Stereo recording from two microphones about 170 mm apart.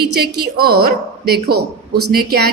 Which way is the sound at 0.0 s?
65° right (ahead or behind).